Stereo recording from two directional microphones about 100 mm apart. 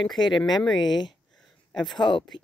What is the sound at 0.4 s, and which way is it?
Speech, centre (ahead or behind).